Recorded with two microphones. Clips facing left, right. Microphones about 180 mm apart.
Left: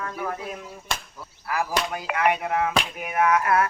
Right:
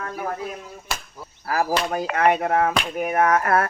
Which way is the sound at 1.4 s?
40° right (ahead or behind).